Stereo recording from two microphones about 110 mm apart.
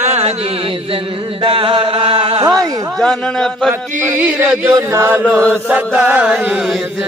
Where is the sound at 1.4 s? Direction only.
55° right (ahead or behind).